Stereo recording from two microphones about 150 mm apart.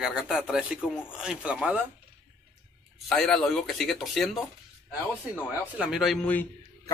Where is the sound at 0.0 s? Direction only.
5° right (ahead or behind).